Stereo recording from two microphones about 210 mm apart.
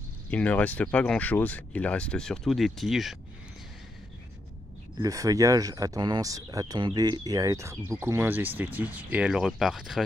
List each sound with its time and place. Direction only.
0.3 s speech: 5° left (ahead or behind)
5.0 s speech: 15° right (ahead or behind)